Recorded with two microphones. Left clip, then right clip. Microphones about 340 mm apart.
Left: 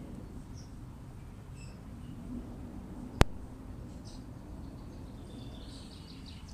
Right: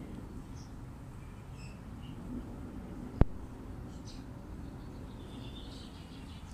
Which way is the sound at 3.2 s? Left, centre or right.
Left.